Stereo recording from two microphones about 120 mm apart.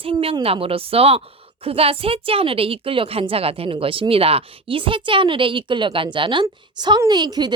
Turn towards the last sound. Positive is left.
turn(degrees=-35)  # may be behind; listen again after turning